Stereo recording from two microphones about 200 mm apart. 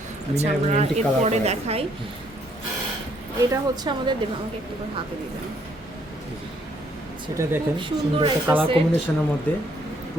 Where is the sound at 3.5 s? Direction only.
20° right (ahead or behind).